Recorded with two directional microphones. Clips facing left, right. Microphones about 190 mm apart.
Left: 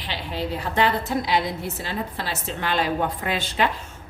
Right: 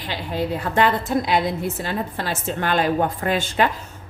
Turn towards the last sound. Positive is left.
turn(degrees=-45)  # may be behind; listen again after turning